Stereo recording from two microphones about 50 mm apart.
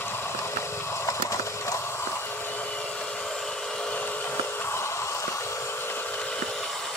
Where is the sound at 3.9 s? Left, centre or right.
Left.